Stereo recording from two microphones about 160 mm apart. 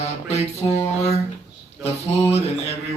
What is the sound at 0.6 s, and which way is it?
Mantra, 25° left (ahead or behind).